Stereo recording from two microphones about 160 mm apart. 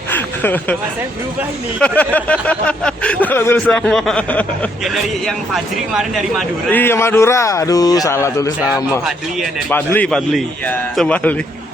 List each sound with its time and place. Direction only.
0.1 s a sound: 10° left (ahead or behind)
1.8 s speech: 10° left (ahead or behind)
6.7 s speech: 15° left (ahead or behind)
9.6 s speech: 10° left (ahead or behind)